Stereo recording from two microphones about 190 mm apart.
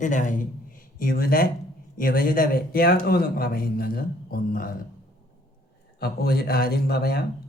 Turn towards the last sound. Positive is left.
turn(degrees=55)  # may be behind; listen again after turning